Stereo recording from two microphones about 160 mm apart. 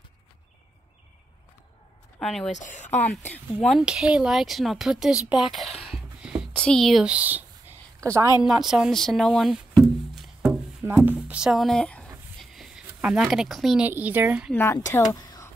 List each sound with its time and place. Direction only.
2.1 s speech: 5° left (ahead or behind)
2.5 s speech: 50° left (ahead or behind)
3.5 s speech: 5° left (ahead or behind)
5.3 s a sound: centre (ahead or behind)
6.5 s speech: 5° left (ahead or behind); by 8.3 s 20° right (ahead or behind)
8.5 s speech: centre (ahead or behind)
12.4 s a sound: centre (ahead or behind)
12.8 s a woman's voice: 5° right (ahead or behind)
14.5 s speech: 15° left (ahead or behind)